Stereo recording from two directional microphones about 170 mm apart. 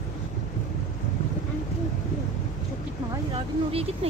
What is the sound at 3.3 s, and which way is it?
Vehicle, 35° right (ahead or behind).